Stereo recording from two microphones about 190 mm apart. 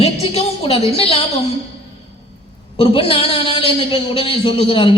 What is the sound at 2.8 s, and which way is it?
A man's voice, 30° left (ahead or behind).